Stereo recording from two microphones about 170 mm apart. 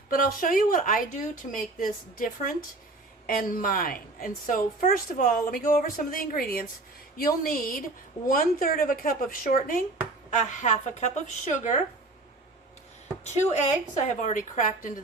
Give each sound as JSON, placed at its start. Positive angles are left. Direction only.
{"t": 0.1, "sound": "a woman's voice", "side_deg": 55}
{"t": 10.3, "sound": "a woman's voice", "side_deg": 45}
{"t": 13.2, "sound": "a woman's voice", "side_deg": 40}